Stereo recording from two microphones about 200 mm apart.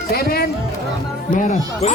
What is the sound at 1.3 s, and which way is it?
Speech, 40° left (ahead or behind).